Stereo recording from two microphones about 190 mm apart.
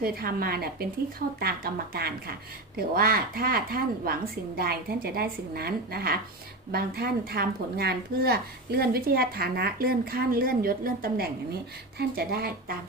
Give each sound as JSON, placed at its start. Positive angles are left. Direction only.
{"t": 0.0, "sound": "a woman's voice", "side_deg": -50}